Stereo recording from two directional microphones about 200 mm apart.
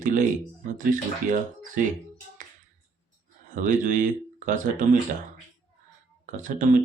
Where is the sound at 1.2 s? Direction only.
40° right (ahead or behind).